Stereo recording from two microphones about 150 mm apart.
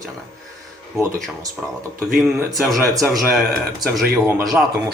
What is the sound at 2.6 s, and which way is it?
Speech, centre (ahead or behind).